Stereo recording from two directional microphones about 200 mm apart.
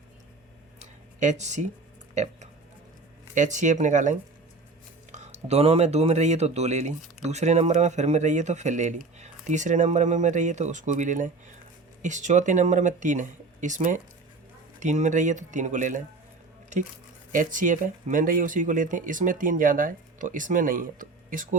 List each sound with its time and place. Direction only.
0.8 s a sound: 35° right (ahead or behind)
3.3 s speech: 40° right (ahead or behind)
17.3 s speech: 40° right (ahead or behind)